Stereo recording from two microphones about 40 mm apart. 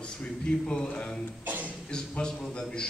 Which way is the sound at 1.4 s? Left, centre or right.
Right.